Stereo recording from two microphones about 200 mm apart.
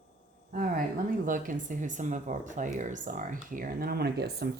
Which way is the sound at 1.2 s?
40° right (ahead or behind).